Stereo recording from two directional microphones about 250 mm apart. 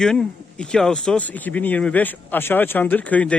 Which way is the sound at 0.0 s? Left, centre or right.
Centre.